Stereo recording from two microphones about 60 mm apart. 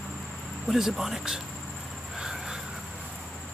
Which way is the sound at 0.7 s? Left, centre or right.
Centre.